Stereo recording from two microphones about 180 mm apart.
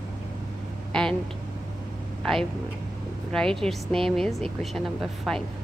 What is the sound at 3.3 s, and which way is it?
A woman's voice, 5° left (ahead or behind).